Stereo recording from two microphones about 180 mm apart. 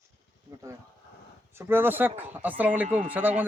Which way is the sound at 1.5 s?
15° right (ahead or behind).